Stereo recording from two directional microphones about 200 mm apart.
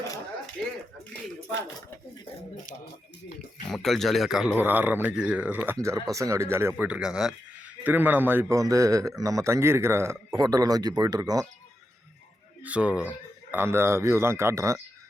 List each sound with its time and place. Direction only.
3.7 s a man's voice: centre (ahead or behind); by 11.4 s 20° right (ahead or behind)
12.6 s a man's voice: 5° right (ahead or behind)